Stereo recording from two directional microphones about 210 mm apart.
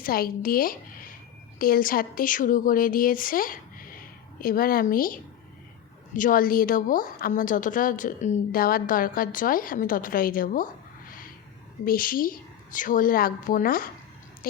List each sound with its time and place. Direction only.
0.0 s a woman's voice: 45° left (ahead or behind)